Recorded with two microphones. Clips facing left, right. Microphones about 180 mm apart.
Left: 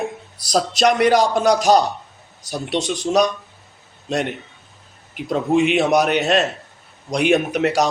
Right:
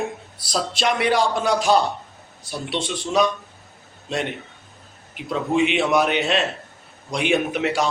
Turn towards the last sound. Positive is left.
turn(degrees=40)  # may be behind; listen again after turning